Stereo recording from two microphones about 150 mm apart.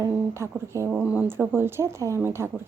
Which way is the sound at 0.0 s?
20° right (ahead or behind).